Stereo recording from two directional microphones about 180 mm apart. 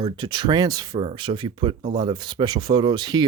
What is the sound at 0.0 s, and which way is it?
Speech, 25° right (ahead or behind).